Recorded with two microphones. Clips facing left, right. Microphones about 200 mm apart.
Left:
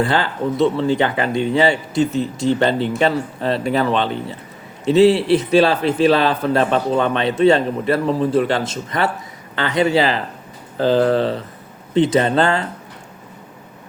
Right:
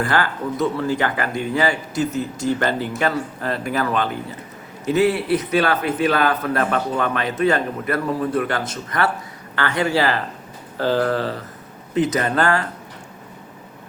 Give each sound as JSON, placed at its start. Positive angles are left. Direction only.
{"t": 0.0, "sound": "speech", "side_deg": 25}